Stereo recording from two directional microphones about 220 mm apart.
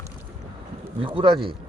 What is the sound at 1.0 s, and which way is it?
Speech, 20° right (ahead or behind).